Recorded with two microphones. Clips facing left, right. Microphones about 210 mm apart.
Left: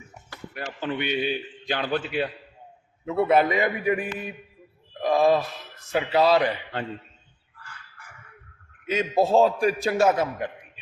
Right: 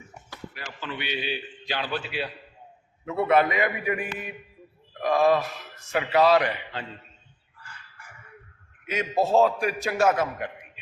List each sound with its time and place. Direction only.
0.6 s a man's voice: 45° left (ahead or behind)
3.1 s a man's voice: 30° left (ahead or behind)
8.9 s a man's voice: 30° left (ahead or behind)